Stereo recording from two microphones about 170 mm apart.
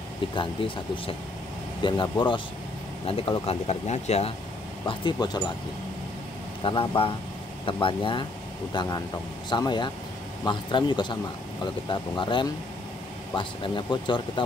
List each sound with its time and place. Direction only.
1.8 s speech: 30° left (ahead or behind)
4.8 s speech: 25° left (ahead or behind)
6.6 s speech: 30° left (ahead or behind)